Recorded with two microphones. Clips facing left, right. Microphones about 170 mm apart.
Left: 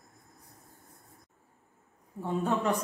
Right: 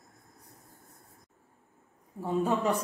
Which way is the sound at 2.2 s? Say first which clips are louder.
Right 1 dB; 5° right (ahead or behind).